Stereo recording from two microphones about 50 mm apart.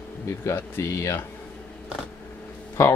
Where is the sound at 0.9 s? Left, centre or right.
Left.